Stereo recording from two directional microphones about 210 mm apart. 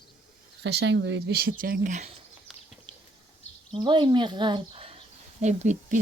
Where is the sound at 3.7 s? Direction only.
20° right (ahead or behind).